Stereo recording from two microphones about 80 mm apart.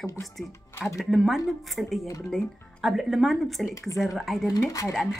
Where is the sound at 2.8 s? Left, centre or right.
Centre.